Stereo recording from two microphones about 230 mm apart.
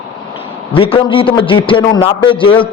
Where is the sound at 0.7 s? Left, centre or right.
Left.